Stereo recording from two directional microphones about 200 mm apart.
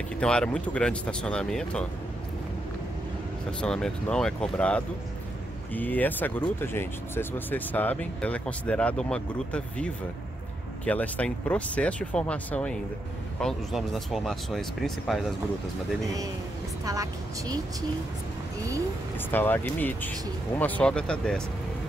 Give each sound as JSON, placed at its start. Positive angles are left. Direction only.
{"t": 0.2, "sound": "speech", "side_deg": 5}
{"t": 3.6, "sound": "speech", "side_deg": 5}
{"t": 16.8, "sound": "a woman's voice", "side_deg": -15}
{"t": 19.3, "sound": "speech", "side_deg": 10}